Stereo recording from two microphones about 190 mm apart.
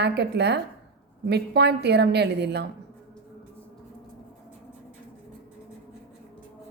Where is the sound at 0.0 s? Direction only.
60° right (ahead or behind).